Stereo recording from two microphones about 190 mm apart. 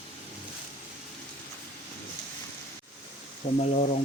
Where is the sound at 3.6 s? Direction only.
40° left (ahead or behind).